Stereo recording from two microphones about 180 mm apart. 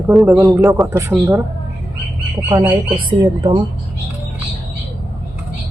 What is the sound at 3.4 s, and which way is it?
Speech, 25° right (ahead or behind).